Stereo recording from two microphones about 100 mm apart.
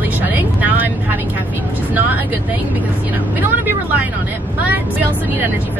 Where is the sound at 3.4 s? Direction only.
20° right (ahead or behind).